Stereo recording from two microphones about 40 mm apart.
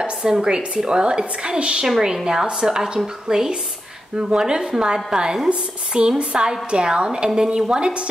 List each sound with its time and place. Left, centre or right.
0.0 s a woman's voice: centre
1.9 s a woman's voice: centre
5.5 s a woman's voice: right